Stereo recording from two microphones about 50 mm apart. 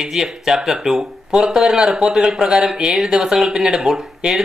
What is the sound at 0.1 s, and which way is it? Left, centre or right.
Speech, centre.